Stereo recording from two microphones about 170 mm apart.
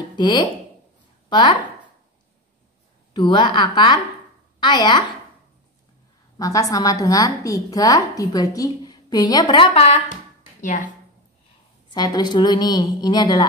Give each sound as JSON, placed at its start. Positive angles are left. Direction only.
{"t": 0.1, "sound": "a woman's voice", "side_deg": 25}
{"t": 3.1, "sound": "a woman's voice", "side_deg": 30}
{"t": 6.3, "sound": "a woman's voice", "side_deg": 20}
{"t": 11.9, "sound": "a woman's voice", "side_deg": 25}